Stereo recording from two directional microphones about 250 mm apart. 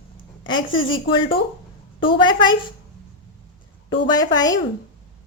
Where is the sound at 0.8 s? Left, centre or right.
Left.